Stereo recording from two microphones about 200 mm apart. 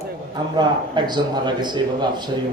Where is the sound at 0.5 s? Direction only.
20° right (ahead or behind).